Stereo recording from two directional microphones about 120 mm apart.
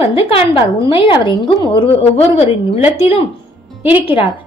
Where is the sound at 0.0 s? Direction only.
55° left (ahead or behind).